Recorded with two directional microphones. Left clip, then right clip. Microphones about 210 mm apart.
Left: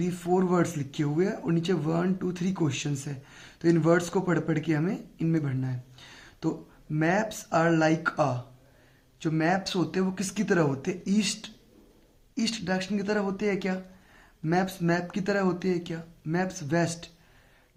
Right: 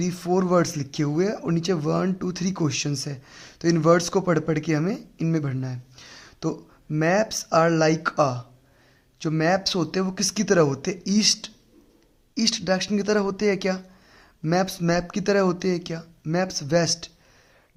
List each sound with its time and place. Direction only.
0.0 s speech: 50° right (ahead or behind)